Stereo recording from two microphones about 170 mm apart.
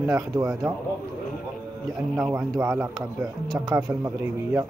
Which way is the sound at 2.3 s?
15° right (ahead or behind).